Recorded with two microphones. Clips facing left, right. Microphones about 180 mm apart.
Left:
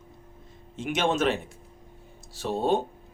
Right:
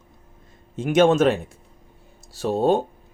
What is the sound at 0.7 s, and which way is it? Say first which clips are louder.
Speech: right 9 dB; 45° right (ahead or behind).